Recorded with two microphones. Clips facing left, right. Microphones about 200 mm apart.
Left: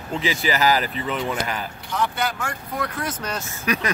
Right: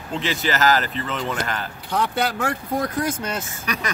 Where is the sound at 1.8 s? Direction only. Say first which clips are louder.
Right 2 dB; 60° right (ahead or behind).